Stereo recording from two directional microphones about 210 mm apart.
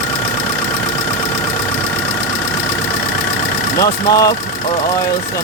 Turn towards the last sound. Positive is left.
turn(degrees=15)  # may be behind; listen again after turning